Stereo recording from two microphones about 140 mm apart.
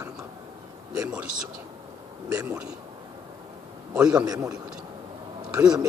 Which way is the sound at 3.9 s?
10° right (ahead or behind).